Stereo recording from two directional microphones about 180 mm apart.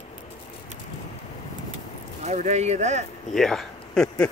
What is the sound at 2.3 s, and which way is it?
Speech, 40° right (ahead or behind).